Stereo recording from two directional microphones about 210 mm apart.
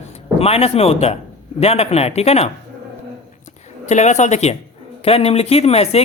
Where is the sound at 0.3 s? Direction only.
30° left (ahead or behind).